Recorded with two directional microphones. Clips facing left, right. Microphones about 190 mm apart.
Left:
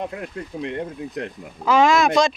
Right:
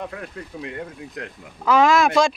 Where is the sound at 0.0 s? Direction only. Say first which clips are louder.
Left 3 dB; 20° left (ahead or behind).